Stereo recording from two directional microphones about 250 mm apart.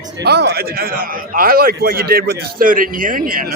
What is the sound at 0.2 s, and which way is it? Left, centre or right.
Speech, right.